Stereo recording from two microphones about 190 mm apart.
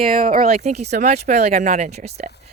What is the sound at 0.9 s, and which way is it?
Speech, 55° right (ahead or behind).